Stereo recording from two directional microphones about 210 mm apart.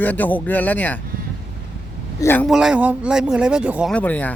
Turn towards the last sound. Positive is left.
turn(degrees=5)  # may be behind; listen again after turning